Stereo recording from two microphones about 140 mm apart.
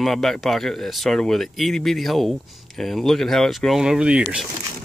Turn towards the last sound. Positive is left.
turn(degrees=-5)  # may be behind; listen again after turning